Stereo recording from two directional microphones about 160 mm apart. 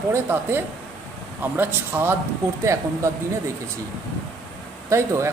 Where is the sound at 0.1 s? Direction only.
15° right (ahead or behind).